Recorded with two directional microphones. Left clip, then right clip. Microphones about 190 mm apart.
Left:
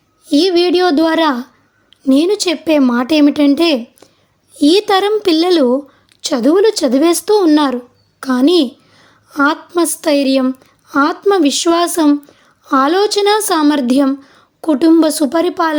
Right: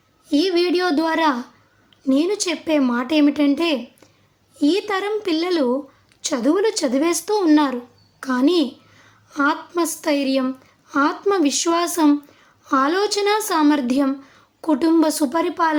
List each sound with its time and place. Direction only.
0.3 s a woman's voice: 40° left (ahead or behind)